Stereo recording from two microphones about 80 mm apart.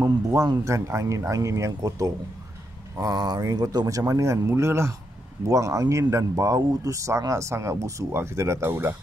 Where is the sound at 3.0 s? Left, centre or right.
Right.